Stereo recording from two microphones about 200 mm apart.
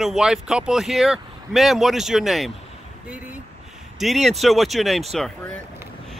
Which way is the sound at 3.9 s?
Centre (ahead or behind).